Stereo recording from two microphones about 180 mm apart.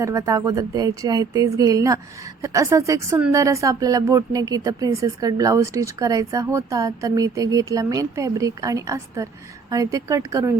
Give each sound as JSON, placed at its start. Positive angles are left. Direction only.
{"t": 0.0, "sound": "speech", "side_deg": -20}